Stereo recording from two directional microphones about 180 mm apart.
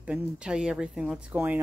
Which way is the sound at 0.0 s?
5° right (ahead or behind).